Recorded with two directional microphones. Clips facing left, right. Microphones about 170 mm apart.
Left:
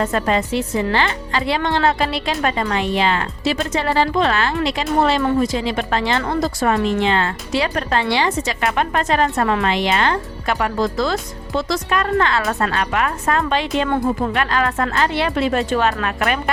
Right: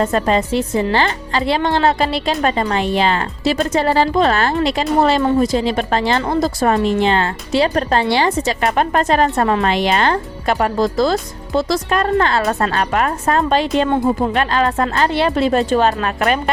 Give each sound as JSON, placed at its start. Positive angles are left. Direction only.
{"t": 0.0, "sound": "a woman's voice", "side_deg": -30}
{"t": 13.9, "sound": "a woman's voice", "side_deg": -25}